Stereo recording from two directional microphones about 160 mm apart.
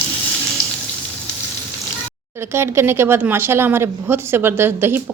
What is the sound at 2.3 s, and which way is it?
A woman's voice, 15° right (ahead or behind).